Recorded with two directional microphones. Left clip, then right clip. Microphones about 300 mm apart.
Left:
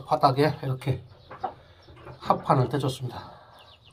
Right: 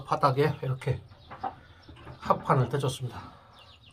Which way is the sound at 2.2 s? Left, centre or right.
Centre.